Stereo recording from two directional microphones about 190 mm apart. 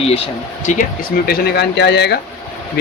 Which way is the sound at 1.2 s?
55° left (ahead or behind).